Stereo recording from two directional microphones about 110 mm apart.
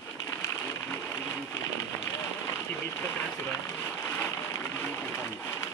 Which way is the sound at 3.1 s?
20° left (ahead or behind).